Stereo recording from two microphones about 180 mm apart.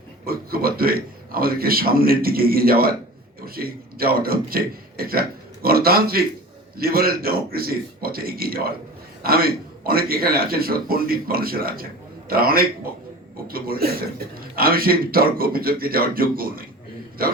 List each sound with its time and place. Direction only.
0.3 s a man's voice: 55° right (ahead or behind)